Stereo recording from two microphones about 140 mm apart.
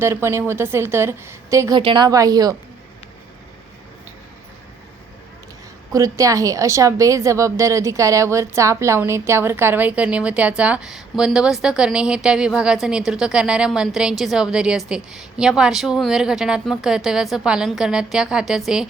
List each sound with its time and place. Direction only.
0.0 s a woman's voice: 20° right (ahead or behind)
1.7 s a woman's voice: 35° right (ahead or behind)
5.9 s a woman's voice: 25° right (ahead or behind); by 18.9 s 5° right (ahead or behind)